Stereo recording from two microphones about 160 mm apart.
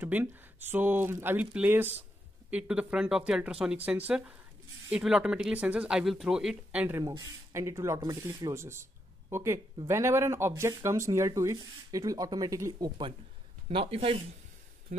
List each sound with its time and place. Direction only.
0.0 s speech: 10° right (ahead or behind)
7.0 s speech: 20° right (ahead or behind); by 14.2 s 35° right (ahead or behind)
14.9 s speech: 50° right (ahead or behind)